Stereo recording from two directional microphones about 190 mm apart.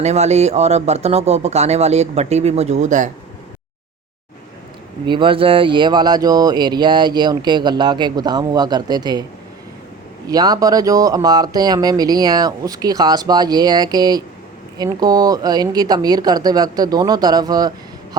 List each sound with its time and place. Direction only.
0.0 s speech: 35° right (ahead or behind)
5.0 s speech: 25° right (ahead or behind)
10.2 s speech: 20° right (ahead or behind)